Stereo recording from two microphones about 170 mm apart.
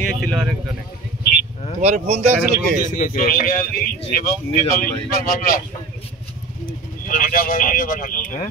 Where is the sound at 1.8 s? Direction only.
40° right (ahead or behind).